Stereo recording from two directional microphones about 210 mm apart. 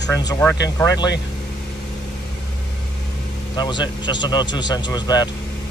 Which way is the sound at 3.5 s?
20° left (ahead or behind).